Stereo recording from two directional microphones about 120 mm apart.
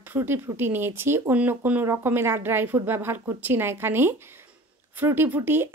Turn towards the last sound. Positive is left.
turn(degrees=-15)  # may be behind; listen again after turning